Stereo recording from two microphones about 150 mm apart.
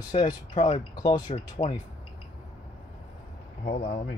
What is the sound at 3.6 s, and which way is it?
Speech, 65° left (ahead or behind).